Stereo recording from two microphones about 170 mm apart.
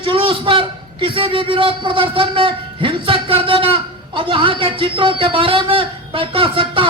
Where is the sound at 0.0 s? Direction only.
30° right (ahead or behind).